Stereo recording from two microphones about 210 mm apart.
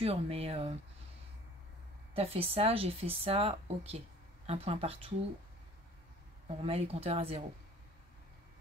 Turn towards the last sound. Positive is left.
turn(degrees=-30)  # may be behind; listen again after turning